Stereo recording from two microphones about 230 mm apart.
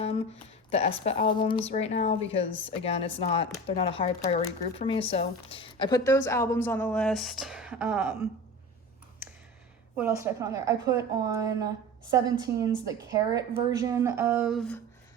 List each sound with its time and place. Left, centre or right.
0.0 s a woman's voice: left; by 8.1 s centre
10.0 s a woman's voice: centre